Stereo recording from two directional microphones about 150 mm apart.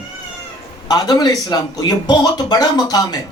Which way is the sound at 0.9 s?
25° left (ahead or behind).